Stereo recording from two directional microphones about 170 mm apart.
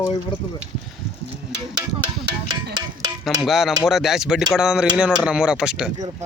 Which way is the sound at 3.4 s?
Centre (ahead or behind).